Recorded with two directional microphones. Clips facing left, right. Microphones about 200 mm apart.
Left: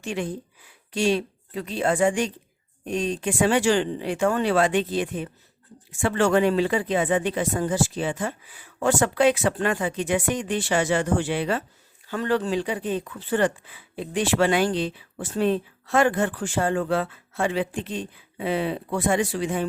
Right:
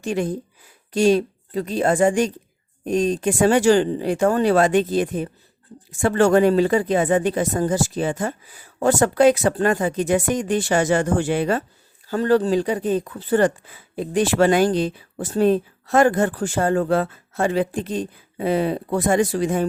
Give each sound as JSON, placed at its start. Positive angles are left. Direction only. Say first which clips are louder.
{"t": 0.0, "sound": "speech", "louder": "right 6 dB", "side_deg": -40}